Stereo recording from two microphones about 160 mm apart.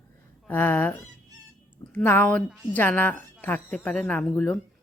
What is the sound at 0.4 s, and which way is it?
A woman's voice, 10° left (ahead or behind).